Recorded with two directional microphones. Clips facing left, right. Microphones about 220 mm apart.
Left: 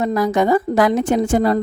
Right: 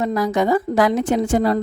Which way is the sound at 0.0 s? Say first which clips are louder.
Left 2 dB; 50° left (ahead or behind).